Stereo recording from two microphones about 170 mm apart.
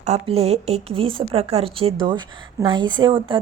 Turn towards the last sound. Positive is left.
turn(degrees=-30)  # may be behind; listen again after turning